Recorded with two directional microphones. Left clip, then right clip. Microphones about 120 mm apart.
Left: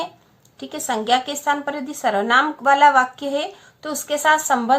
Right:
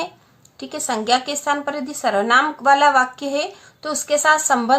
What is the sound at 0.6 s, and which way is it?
A woman's voice, 25° right (ahead or behind).